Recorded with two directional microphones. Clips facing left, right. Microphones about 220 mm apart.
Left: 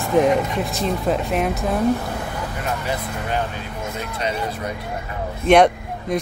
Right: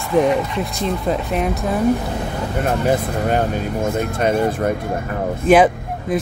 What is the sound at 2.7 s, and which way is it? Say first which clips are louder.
Speech: right 9 dB; 50° right (ahead or behind).